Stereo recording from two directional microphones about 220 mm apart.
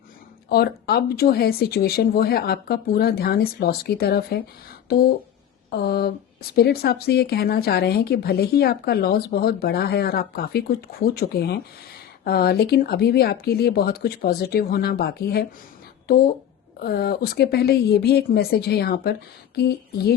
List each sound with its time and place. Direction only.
0.4 s speech: 45° left (ahead or behind)